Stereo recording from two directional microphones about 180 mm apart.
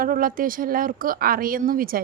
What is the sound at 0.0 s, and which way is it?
A woman's voice, 50° right (ahead or behind).